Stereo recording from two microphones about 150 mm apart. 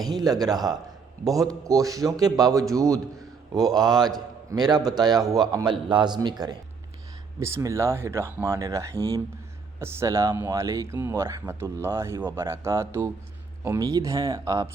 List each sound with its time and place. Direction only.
0.0 s speech: 25° right (ahead or behind)